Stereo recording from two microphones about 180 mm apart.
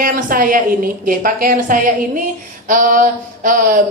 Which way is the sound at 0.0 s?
50° right (ahead or behind).